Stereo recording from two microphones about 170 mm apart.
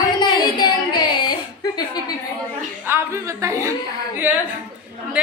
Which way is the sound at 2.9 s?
15° right (ahead or behind).